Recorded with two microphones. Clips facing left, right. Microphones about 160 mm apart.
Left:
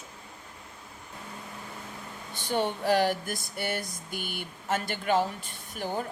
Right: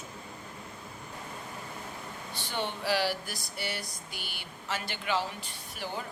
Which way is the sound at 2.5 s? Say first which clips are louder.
Left 6 dB; 45° left (ahead or behind).